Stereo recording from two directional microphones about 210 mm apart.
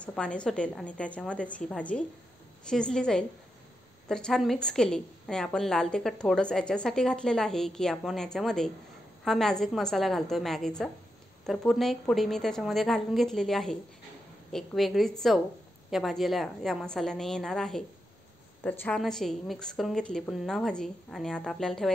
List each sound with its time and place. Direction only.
0.0 s a woman's voice: 5° left (ahead or behind)